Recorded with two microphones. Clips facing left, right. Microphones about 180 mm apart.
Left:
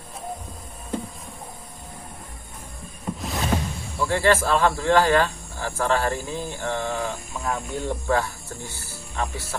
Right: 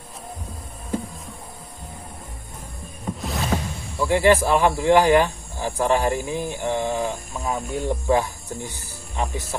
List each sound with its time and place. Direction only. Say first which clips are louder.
3.1 s mechanisms: right 1 dB; centre (ahead or behind)
4.0 s speech: right 3 dB; 15° right (ahead or behind)